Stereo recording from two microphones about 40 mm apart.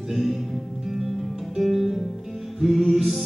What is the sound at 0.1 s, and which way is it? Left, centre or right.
Music, centre.